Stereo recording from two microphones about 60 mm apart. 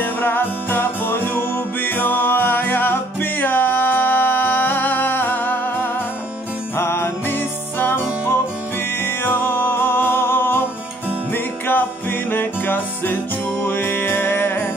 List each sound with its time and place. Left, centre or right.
0.0 s music: left